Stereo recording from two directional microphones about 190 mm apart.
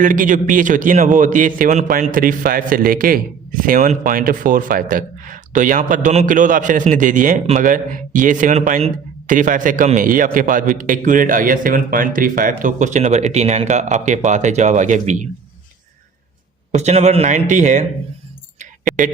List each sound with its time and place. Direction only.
0.0 s a man's voice: 45° right (ahead or behind)
16.7 s a man's voice: 35° right (ahead or behind)
18.6 s a sound: 45° right (ahead or behind)